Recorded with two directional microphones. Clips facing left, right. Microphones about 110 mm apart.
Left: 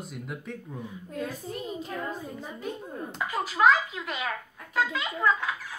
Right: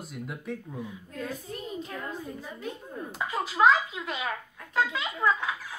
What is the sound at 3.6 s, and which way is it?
A woman's voice, 20° right (ahead or behind).